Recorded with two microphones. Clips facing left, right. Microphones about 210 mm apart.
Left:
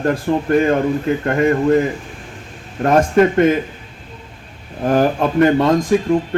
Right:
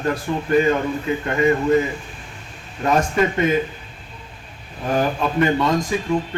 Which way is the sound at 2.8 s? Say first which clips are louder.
Left 6 dB; 55° left (ahead or behind).